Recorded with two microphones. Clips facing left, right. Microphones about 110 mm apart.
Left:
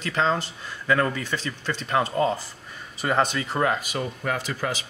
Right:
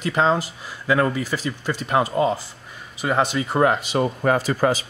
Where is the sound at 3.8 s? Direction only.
40° right (ahead or behind).